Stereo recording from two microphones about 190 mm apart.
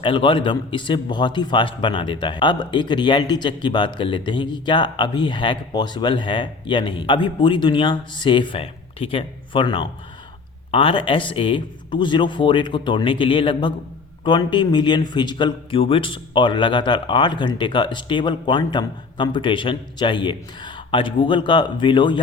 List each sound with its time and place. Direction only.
0.0 s a man's voice: 25° left (ahead or behind)